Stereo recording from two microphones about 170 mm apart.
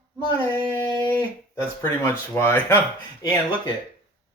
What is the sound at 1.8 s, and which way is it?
Speech, 15° left (ahead or behind).